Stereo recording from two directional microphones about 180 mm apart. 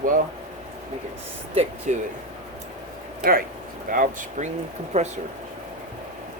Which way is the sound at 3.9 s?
45° right (ahead or behind).